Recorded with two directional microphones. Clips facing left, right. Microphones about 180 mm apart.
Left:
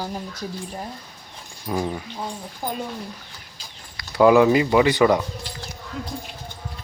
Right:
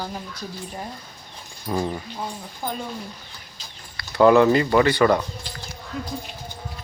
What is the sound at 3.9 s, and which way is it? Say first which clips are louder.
Speech: even; 10° left (ahead or behind).